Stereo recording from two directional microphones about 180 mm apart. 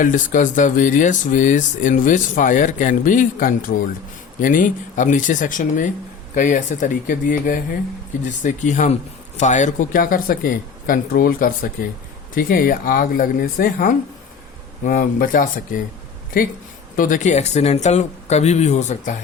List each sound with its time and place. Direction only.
0.0 s speech: 45° left (ahead or behind)
17.0 s speech: 45° left (ahead or behind)